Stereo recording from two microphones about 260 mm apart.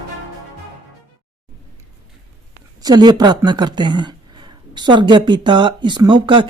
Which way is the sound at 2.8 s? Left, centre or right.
Centre.